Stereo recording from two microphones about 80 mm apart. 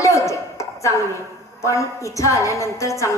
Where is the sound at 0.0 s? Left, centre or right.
Left.